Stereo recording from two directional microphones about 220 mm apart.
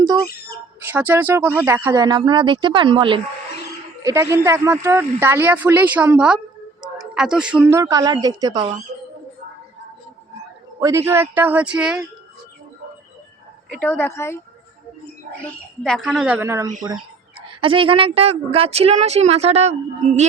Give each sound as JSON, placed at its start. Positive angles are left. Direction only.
{"t": 0.9, "sound": "a woman's voice", "side_deg": -10}
{"t": 10.8, "sound": "a man's voice", "side_deg": -15}
{"t": 13.7, "sound": "speech", "side_deg": 5}
{"t": 15.8, "sound": "speech", "side_deg": 5}
{"t": 17.4, "sound": "a woman's voice", "side_deg": -25}